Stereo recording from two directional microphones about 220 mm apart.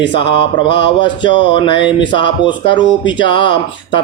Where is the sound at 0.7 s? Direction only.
20° left (ahead or behind).